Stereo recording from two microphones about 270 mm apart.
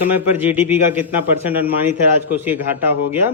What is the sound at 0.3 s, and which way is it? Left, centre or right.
A man's voice, centre.